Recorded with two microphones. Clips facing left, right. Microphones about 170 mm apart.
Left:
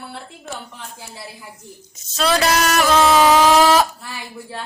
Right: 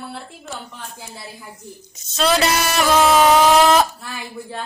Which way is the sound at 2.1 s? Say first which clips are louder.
Even; centre (ahead or behind).